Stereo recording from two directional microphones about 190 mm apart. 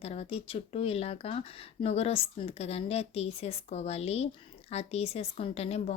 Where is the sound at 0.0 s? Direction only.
35° left (ahead or behind).